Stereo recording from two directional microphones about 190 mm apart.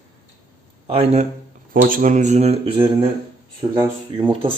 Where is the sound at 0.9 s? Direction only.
30° right (ahead or behind).